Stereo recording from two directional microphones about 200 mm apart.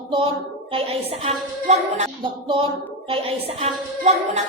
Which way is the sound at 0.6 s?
30° right (ahead or behind).